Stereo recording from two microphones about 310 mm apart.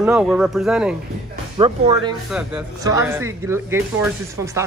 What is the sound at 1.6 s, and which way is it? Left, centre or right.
Speech, centre.